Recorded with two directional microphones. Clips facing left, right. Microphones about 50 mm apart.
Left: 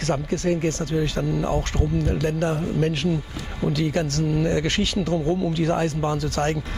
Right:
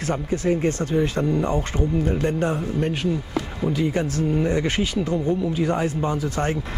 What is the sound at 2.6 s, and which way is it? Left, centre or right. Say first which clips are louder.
Speech: left 1 dB; centre.